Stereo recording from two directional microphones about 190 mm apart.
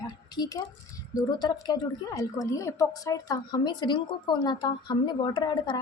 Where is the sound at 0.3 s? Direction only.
20° left (ahead or behind).